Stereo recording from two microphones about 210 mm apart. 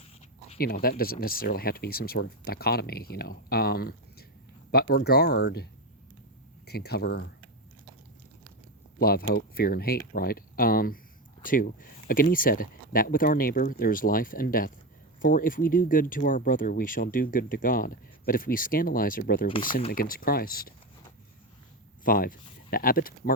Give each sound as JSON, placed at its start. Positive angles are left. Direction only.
{"t": 0.0, "sound": "a sound", "side_deg": 30}
{"t": 0.6, "sound": "speech", "side_deg": 45}
{"t": 6.7, "sound": "speech", "side_deg": 50}
{"t": 9.0, "sound": "speech", "side_deg": 45}
{"t": 22.0, "sound": "speech", "side_deg": 40}